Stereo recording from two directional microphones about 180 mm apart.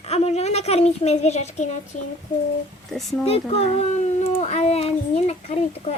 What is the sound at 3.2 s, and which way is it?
A woman's voice, 35° left (ahead or behind).